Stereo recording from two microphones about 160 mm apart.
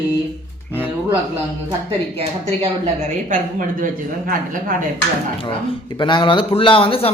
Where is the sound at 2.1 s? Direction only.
40° right (ahead or behind); by 3.8 s 55° right (ahead or behind).